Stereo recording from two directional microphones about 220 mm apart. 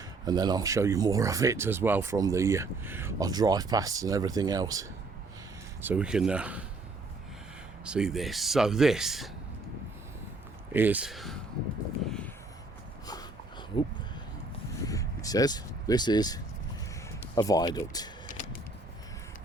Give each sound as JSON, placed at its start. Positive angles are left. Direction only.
{"t": 0.3, "sound": "speech", "side_deg": -20}
{"t": 7.9, "sound": "speech", "side_deg": -5}
{"t": 10.7, "sound": "speech", "side_deg": -10}
{"t": 12.0, "sound": "a sound", "side_deg": 5}
{"t": 14.8, "sound": "speech", "side_deg": 15}